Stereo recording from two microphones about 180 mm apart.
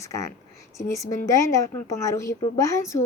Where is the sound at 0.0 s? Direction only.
20° left (ahead or behind).